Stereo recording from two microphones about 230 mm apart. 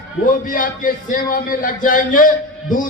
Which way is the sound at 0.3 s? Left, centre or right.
Left.